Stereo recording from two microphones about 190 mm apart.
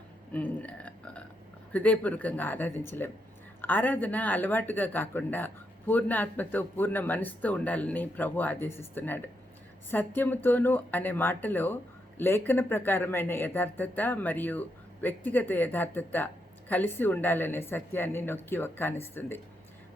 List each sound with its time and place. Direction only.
0.3 s speech: 5° left (ahead or behind)